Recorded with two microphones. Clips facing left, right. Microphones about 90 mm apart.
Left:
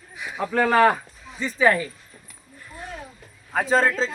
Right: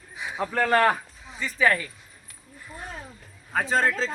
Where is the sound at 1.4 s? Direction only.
20° left (ahead or behind).